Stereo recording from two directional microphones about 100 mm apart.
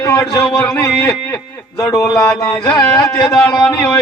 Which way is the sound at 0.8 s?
30° left (ahead or behind).